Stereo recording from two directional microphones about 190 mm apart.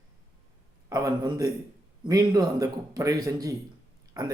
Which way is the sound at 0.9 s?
20° right (ahead or behind).